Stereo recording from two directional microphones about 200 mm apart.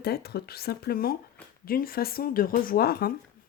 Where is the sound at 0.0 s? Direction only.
50° left (ahead or behind).